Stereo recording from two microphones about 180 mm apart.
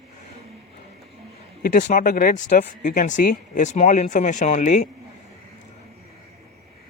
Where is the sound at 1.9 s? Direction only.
50° left (ahead or behind).